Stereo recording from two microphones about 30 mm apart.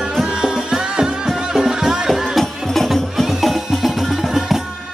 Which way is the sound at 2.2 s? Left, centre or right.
Centre.